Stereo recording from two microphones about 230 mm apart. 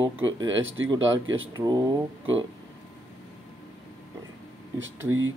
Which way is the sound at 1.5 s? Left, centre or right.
Centre.